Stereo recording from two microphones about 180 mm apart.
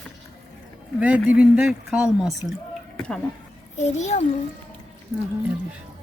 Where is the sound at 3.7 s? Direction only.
40° left (ahead or behind).